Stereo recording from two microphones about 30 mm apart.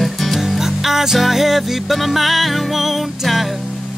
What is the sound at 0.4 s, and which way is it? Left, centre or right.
Music, centre.